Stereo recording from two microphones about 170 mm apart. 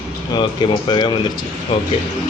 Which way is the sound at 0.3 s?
25° left (ahead or behind).